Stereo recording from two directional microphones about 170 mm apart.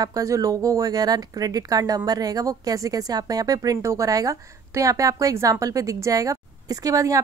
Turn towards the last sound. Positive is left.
turn(degrees=-20)  # may be behind; listen again after turning